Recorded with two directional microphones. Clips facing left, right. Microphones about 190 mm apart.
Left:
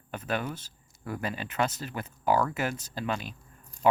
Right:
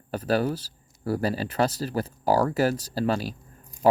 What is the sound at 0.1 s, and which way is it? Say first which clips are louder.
Speech: right 8 dB; 35° right (ahead or behind).